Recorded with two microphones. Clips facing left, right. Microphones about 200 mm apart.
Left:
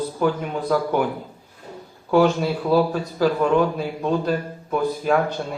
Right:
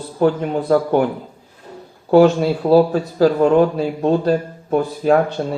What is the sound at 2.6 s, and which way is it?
A man's voice, 35° right (ahead or behind).